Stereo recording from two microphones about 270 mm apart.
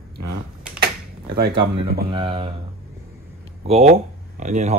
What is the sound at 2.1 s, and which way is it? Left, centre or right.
Speech, centre.